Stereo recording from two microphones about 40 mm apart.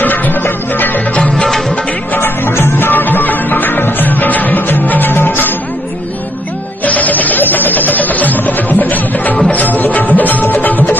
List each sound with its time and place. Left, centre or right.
0.0 s music: left
2.1 s music: left
6.9 s music: left